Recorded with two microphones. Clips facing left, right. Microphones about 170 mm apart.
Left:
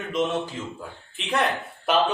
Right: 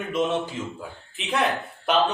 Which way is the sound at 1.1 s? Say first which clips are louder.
Even; centre (ahead or behind).